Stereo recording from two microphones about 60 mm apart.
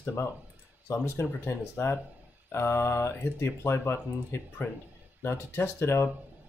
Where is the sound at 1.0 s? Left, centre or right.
Left.